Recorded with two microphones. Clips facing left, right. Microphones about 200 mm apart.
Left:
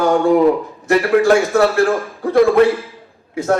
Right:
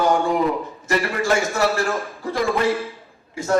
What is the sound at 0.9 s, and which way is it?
A man's voice, 60° left (ahead or behind).